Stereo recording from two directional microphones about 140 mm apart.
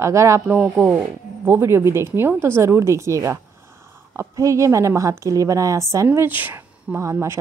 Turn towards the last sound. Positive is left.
turn(degrees=-20)  # may be behind; listen again after turning